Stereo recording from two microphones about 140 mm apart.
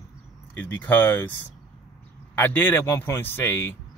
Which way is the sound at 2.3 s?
15° left (ahead or behind).